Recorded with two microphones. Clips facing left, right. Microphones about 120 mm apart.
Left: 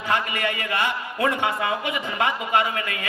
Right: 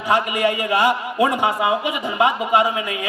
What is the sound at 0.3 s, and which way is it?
A man's voice, 15° right (ahead or behind).